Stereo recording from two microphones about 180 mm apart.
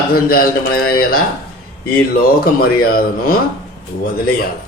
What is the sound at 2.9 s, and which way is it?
Speech, 55° left (ahead or behind).